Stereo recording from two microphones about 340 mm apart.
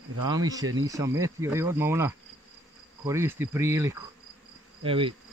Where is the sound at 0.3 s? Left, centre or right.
Centre.